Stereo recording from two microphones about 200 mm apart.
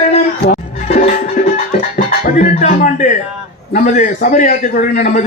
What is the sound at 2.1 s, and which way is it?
A man's voice, 40° left (ahead or behind).